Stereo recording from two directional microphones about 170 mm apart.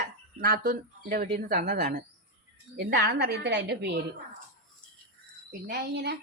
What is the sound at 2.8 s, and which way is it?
A woman's voice, 80° right.